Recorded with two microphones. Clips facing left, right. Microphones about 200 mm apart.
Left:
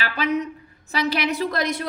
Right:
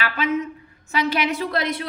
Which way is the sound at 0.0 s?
35° left (ahead or behind).